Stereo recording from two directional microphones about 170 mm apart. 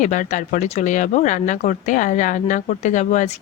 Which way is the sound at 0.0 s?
45° left (ahead or behind).